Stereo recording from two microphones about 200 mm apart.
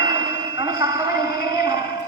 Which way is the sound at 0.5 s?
20° right (ahead or behind).